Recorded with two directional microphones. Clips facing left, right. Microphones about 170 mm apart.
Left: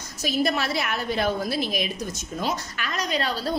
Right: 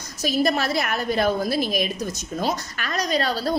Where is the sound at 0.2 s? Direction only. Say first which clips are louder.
Right 3 dB; 40° right (ahead or behind).